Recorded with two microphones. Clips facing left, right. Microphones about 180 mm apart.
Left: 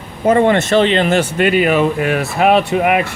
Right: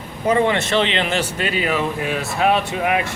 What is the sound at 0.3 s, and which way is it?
Speech, 50° left (ahead or behind).